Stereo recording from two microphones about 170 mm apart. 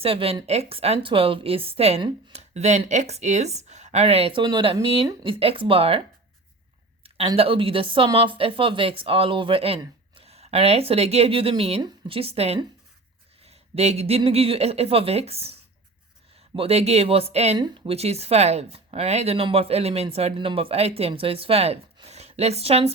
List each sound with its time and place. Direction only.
0.0 s a woman's voice: 35° right (ahead or behind)
7.0 s a woman's voice: 35° right (ahead or behind)
13.4 s a sound: 35° right (ahead or behind)
14.2 s a woman's voice: 35° right (ahead or behind)
16.6 s a woman's voice: 35° right (ahead or behind)